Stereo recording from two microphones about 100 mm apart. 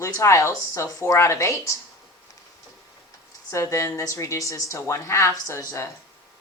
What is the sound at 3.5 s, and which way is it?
A woman's voice, 30° left (ahead or behind).